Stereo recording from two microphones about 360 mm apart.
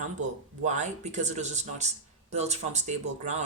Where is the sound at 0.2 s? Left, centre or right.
Centre.